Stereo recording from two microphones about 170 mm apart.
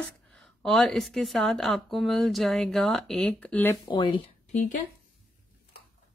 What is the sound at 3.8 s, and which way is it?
Speech, 25° left (ahead or behind).